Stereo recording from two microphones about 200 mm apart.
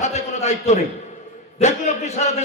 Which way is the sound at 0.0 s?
35° left (ahead or behind).